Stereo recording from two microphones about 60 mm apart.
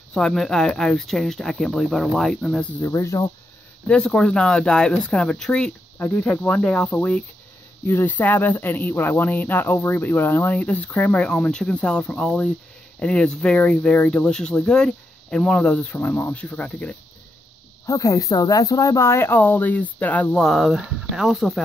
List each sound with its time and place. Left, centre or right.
0.1 s speech: centre
2.9 s speech: left
4.0 s speech: centre
5.9 s speech: left
6.4 s speech: centre
7.8 s speech: left
17.8 s speech: left
19.3 s speech: left
20.3 s speech: centre